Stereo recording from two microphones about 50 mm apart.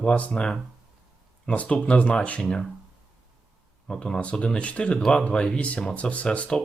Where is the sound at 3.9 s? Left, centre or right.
Centre.